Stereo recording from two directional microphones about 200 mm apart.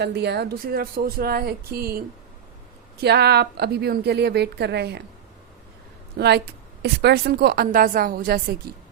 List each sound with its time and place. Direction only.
0.0 s speech: 55° right (ahead or behind)
3.0 s a woman's voice: 55° right (ahead or behind)
6.1 s a woman's voice: 55° right (ahead or behind)